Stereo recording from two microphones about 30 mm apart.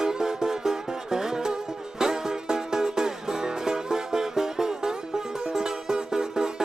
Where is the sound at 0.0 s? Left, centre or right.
Centre.